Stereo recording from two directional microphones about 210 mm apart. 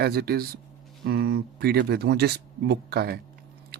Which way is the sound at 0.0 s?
50° right (ahead or behind).